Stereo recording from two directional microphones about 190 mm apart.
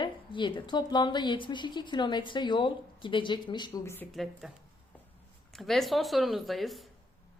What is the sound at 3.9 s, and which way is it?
Speech, 5° left (ahead or behind).